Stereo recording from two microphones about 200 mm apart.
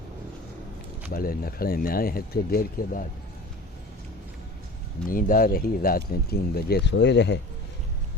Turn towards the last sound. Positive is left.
turn(degrees=60)  # may be behind; listen again after turning